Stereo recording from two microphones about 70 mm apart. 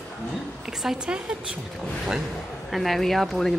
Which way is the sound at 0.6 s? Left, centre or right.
Centre.